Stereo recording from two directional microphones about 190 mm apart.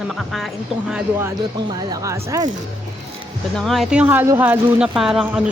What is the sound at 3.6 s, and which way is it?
Speech, centre (ahead or behind).